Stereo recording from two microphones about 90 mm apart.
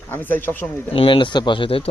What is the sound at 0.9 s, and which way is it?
Speech, 80° left.